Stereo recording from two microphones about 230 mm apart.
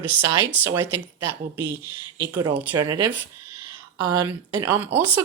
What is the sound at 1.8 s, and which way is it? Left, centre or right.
Speech, centre.